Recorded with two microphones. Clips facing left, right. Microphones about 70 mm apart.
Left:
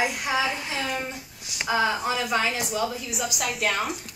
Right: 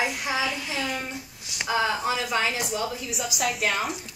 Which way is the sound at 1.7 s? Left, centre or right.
Centre.